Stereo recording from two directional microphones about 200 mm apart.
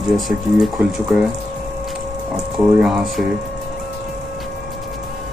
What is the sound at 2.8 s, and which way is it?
Speech, centre (ahead or behind).